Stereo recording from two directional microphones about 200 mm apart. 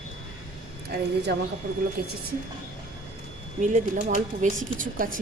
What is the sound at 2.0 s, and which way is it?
Speech, 50° right (ahead or behind).